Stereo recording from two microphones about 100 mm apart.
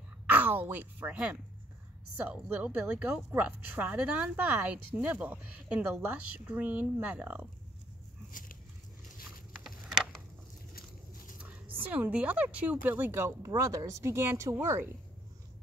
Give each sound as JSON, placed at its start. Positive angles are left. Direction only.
{"t": 0.3, "sound": "a woman's voice", "side_deg": -20}
{"t": 9.5, "sound": "a sound", "side_deg": 0}
{"t": 11.4, "sound": "speech", "side_deg": -15}